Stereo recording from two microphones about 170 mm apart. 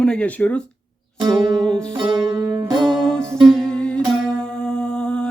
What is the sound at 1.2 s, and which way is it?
Music, 30° right (ahead or behind).